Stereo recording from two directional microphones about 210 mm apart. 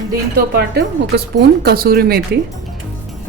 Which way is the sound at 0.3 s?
50° right (ahead or behind).